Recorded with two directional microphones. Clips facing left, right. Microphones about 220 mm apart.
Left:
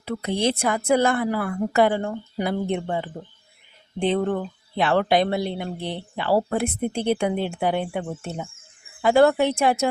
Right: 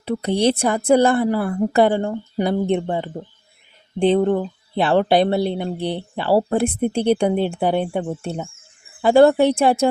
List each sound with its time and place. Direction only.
0.0 s speech: 35° right (ahead or behind)